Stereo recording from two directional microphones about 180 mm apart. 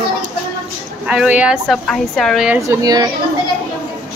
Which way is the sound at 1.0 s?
5° right (ahead or behind).